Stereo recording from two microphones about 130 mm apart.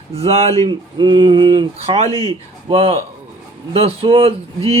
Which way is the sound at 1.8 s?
55° right (ahead or behind).